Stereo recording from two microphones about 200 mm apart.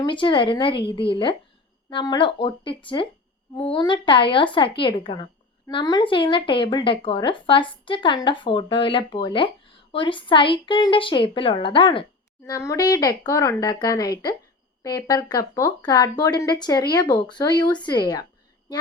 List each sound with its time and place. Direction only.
0.0 s a woman's voice: 25° left (ahead or behind)